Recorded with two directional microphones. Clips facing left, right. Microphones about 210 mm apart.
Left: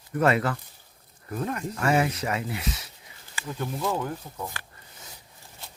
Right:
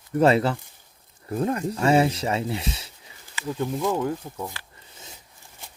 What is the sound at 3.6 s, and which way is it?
Speech, 15° right (ahead or behind).